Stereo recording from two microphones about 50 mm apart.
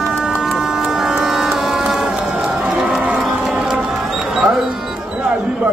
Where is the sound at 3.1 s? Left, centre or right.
Right.